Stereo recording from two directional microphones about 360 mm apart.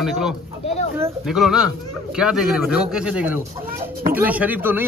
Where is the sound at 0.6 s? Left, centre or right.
Centre.